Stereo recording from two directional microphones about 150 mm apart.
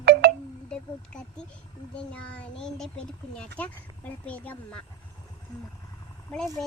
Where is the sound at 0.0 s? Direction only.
90° right.